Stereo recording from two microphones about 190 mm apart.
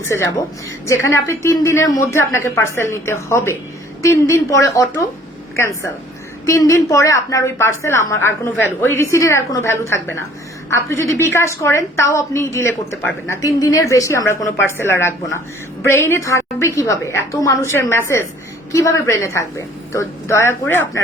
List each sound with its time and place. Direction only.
0.0 s a woman's voice: 15° left (ahead or behind)